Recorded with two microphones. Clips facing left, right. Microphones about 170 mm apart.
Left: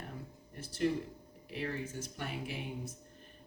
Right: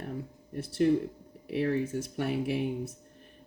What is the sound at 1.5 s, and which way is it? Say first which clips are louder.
Speech: right 10 dB; 65° right (ahead or behind).